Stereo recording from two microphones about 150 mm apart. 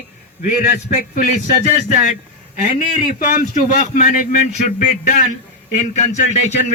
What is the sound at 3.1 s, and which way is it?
Speech, 70° left (ahead or behind).